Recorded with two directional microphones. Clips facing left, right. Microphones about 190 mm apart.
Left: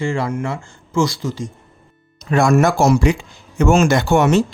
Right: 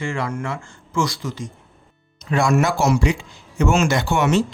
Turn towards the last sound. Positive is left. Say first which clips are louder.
# left 4 dB
turn(degrees=45)  # may be behind; listen again after turning